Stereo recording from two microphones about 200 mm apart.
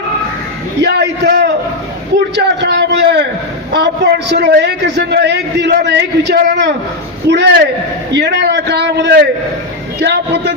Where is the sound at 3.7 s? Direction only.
60° right (ahead or behind).